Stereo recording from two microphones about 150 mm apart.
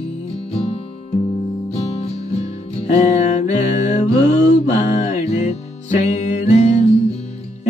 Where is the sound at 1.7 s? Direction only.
45° left (ahead or behind).